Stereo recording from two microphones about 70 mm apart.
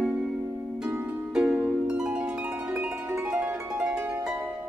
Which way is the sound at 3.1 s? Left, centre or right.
Right.